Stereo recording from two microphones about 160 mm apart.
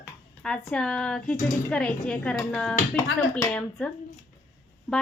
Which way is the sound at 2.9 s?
15° left (ahead or behind).